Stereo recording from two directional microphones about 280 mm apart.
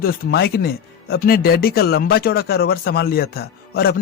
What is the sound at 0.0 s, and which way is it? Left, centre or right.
Speech, left.